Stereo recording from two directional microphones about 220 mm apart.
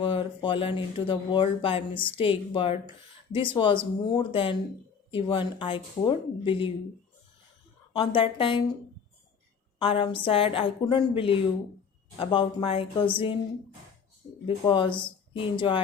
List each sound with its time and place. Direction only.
0.0 s speech: 25° left (ahead or behind)
7.9 s speech: 25° left (ahead or behind)
9.7 s a woman's voice: 25° left (ahead or behind)
14.4 s speech: 20° left (ahead or behind)